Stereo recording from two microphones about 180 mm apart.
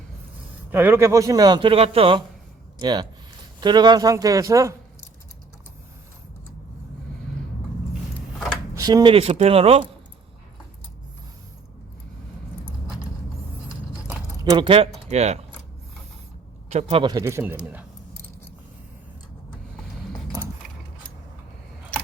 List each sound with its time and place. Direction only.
0.7 s speech: 10° right (ahead or behind)
8.7 s speech: 20° right (ahead or behind)
14.5 s speech: 30° right (ahead or behind)
16.6 s speech: 35° right (ahead or behind)
17.1 s speech: 20° right (ahead or behind)
20.4 s keys jangling: 20° right (ahead or behind)